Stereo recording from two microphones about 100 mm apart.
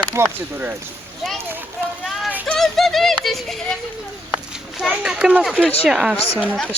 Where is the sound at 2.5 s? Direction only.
5° left (ahead or behind).